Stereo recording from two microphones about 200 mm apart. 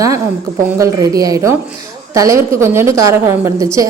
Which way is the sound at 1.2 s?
15° right (ahead or behind).